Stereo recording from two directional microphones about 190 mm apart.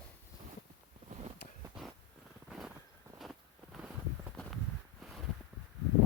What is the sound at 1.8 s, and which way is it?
Purr, 5° right (ahead or behind).